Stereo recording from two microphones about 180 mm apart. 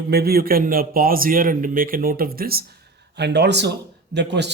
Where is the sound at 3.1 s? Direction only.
70° right (ahead or behind).